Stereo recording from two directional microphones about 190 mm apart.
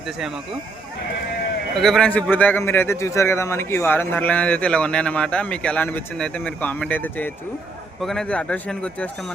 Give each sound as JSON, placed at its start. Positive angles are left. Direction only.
{"t": 1.7, "sound": "speech", "side_deg": 0}